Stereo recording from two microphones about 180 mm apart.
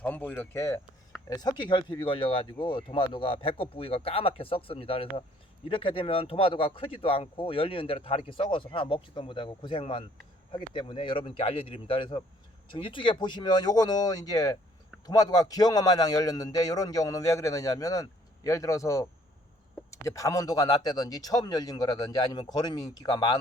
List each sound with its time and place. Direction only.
0.0 s speech: 10° left (ahead or behind)